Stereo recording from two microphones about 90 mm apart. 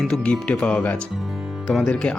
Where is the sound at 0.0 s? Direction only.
10° left (ahead or behind).